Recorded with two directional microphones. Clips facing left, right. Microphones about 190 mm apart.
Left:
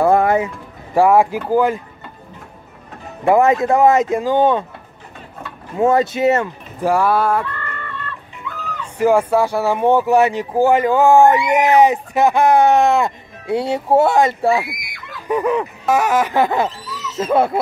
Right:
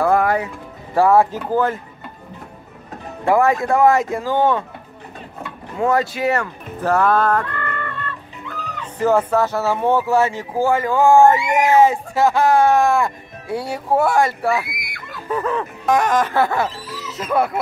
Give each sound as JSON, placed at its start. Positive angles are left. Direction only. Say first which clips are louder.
{"t": 0.0, "sound": "music", "louder": "left 3 dB", "side_deg": 25}
{"t": 3.3, "sound": "speech", "louder": "left 3 dB", "side_deg": 20}
{"t": 5.8, "sound": "speech", "louder": "left 4 dB", "side_deg": 20}
{"t": 6.8, "sound": "music", "louder": "left 1 dB", "side_deg": 10}
{"t": 7.5, "sound": "music", "louder": "right 4 dB", "side_deg": -50}
{"t": 8.9, "sound": "speech", "louder": "left 2 dB", "side_deg": 10}
{"t": 15.2, "sound": "music", "louder": "left 4 dB", "side_deg": 15}
{"t": 17.2, "sound": "speech", "louder": "left 4 dB", "side_deg": 25}